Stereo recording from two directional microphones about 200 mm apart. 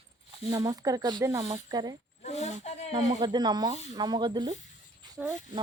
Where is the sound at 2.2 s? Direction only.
35° left (ahead or behind).